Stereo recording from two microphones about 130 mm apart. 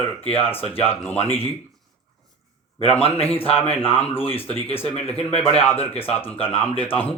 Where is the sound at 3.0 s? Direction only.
50° left (ahead or behind).